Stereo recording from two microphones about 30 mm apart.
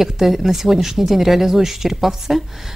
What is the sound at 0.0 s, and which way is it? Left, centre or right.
Speech, centre.